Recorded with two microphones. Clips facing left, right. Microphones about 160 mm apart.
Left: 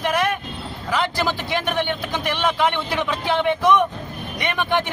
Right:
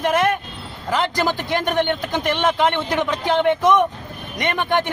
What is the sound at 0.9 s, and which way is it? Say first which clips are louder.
A man's voice: right 2 dB; 15° right (ahead or behind).